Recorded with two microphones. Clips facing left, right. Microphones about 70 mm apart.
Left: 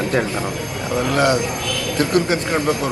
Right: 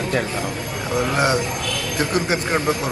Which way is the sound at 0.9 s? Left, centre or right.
Right.